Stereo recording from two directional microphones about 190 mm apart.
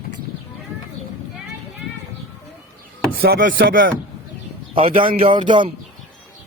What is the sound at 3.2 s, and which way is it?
Chopping, 50° right (ahead or behind).